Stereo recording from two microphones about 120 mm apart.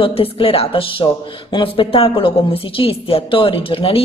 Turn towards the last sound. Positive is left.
turn(degrees=50)  # may be behind; listen again after turning